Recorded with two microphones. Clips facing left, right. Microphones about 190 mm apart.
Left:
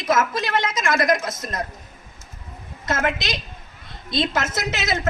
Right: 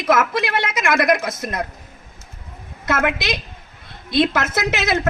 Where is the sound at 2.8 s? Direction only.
60° right (ahead or behind).